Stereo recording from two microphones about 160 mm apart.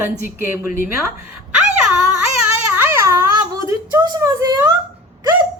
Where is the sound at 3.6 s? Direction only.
20° right (ahead or behind).